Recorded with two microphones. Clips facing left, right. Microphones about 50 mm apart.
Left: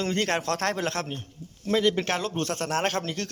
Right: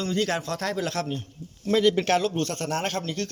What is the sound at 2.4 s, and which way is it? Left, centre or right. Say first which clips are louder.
Speech: left 1 dB; left.